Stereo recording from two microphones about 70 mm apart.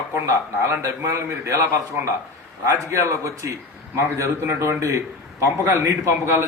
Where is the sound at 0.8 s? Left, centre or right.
Right.